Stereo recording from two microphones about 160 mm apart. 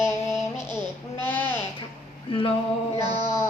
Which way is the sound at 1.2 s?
10° left (ahead or behind).